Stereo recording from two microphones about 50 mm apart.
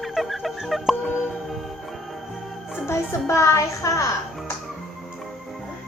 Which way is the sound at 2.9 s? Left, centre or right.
Left.